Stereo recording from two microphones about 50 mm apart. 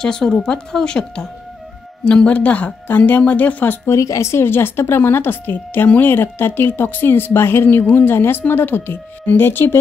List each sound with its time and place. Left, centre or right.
0.0 s a woman's voice: centre; by 3.7 s left
3.8 s speech: left
4.5 s speech: left